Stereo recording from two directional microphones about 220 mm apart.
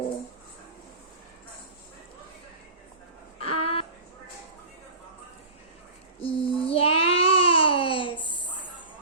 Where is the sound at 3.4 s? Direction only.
25° left (ahead or behind).